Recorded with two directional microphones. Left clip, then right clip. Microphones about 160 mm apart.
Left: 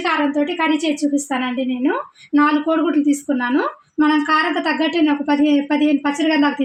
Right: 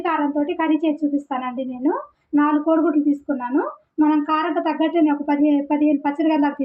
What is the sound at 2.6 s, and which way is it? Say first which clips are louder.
A woman's voice: left 1 dB; 55° left (ahead or behind).